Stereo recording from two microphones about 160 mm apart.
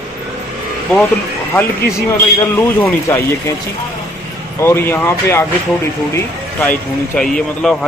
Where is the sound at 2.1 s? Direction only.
15° left (ahead or behind).